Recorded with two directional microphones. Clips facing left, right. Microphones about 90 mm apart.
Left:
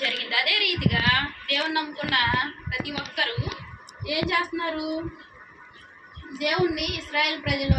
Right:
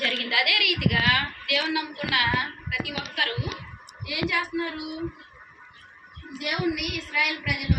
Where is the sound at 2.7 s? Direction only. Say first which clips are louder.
Even; 25° left (ahead or behind).